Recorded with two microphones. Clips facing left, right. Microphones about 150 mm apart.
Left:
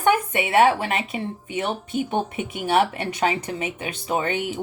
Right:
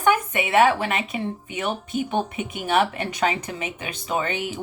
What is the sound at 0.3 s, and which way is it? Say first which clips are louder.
Speech: even; 30° left (ahead or behind).